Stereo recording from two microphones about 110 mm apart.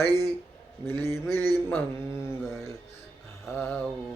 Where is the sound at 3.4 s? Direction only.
20° left (ahead or behind).